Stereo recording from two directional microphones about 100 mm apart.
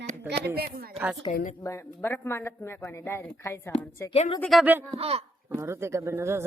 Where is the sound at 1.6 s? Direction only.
25° left (ahead or behind).